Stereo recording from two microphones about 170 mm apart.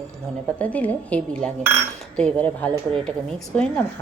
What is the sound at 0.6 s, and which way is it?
A woman's voice, 10° left (ahead or behind).